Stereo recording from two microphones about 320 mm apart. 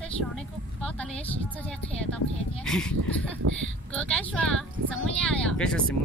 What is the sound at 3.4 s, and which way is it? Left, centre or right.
Speech, right.